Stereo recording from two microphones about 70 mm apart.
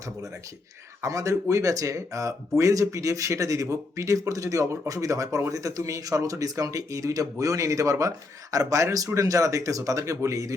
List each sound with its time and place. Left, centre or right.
1.0 s a man's voice: right